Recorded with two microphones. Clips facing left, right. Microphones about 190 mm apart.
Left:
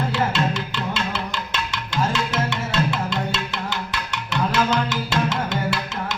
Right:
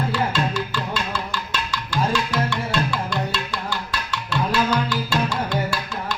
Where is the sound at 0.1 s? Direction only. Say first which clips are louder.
Left 1 dB; 20° left (ahead or behind).